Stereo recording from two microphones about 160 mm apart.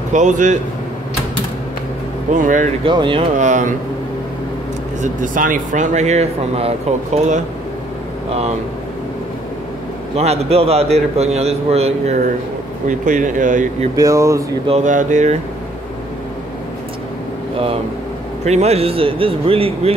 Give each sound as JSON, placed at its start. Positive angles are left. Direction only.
{"t": 0.1, "sound": "speech", "side_deg": -50}
{"t": 2.3, "sound": "speech", "side_deg": -55}
{"t": 2.8, "sound": "a man's voice", "side_deg": -30}
{"t": 3.3, "sound": "speech", "side_deg": -50}
{"t": 5.0, "sound": "speech", "side_deg": -55}
{"t": 8.3, "sound": "a man's voice", "side_deg": -40}
{"t": 10.1, "sound": "a man's voice", "side_deg": -40}
{"t": 12.8, "sound": "speech", "side_deg": -50}
{"t": 13.9, "sound": "speech", "side_deg": -20}
{"t": 14.7, "sound": "speech", "side_deg": -50}
{"t": 18.4, "sound": "a man's voice", "side_deg": -45}